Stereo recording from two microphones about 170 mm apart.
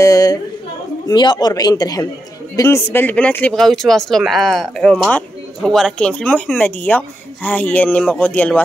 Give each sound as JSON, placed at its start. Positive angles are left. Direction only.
{"t": 0.0, "sound": "speech", "side_deg": 20}